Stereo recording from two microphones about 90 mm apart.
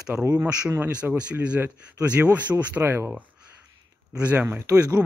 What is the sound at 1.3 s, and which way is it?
Speech, 15° right (ahead or behind).